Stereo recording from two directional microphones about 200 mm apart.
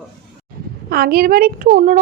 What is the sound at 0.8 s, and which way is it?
A woman's voice, 50° right (ahead or behind).